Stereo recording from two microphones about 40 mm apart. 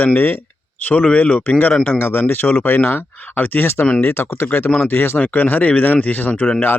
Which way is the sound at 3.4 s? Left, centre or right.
Left.